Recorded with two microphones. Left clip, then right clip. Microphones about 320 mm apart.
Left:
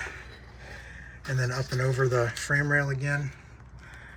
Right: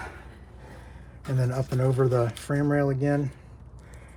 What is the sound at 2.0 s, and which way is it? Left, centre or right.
Speech, right.